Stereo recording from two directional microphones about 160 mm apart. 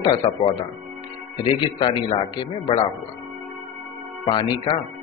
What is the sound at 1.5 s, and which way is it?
A man's voice, 30° left (ahead or behind).